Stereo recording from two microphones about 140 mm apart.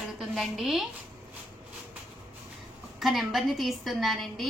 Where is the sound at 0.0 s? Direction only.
Centre (ahead or behind).